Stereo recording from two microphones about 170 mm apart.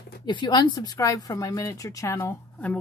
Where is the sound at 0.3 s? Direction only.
25° left (ahead or behind).